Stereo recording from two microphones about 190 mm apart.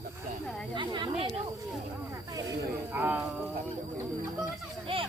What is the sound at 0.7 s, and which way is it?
Chatter, 25° right (ahead or behind).